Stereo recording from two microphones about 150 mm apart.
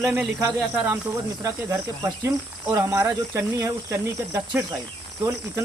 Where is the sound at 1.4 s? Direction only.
20° right (ahead or behind).